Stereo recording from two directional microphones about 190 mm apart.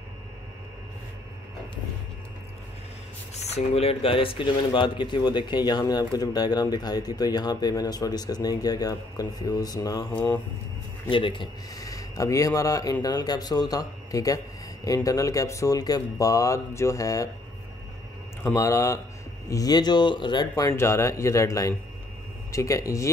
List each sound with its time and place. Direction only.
3.3 s speech: 35° left (ahead or behind); by 10.0 s 20° left (ahead or behind)
11.1 s speech: 25° left (ahead or behind)
18.4 s speech: 15° left (ahead or behind)